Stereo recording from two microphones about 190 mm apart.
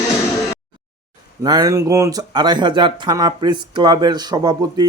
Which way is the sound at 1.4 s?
20° right (ahead or behind).